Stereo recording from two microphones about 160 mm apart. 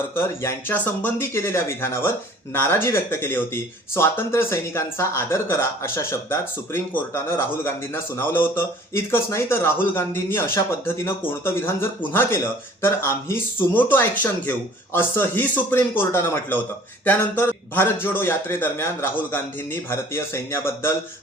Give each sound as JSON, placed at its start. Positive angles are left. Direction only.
{"t": 0.2, "sound": "speech", "side_deg": 15}